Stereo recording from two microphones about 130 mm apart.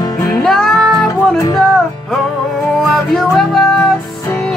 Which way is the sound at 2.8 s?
Centre (ahead or behind).